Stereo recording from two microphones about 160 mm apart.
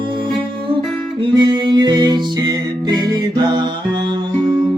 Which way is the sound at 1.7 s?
25° right (ahead or behind).